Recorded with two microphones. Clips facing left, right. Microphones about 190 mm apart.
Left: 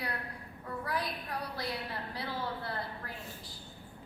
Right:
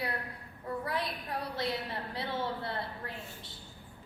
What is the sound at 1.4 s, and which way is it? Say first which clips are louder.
A woman's voice: right 6 dB; 25° right (ahead or behind).